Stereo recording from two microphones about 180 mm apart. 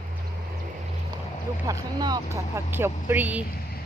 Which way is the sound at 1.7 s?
20° right (ahead or behind).